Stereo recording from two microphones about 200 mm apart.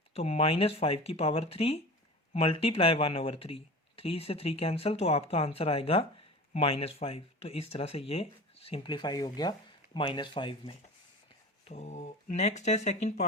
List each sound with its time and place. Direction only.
0.1 s speech: 30° left (ahead or behind)
11.6 s speech: 35° left (ahead or behind)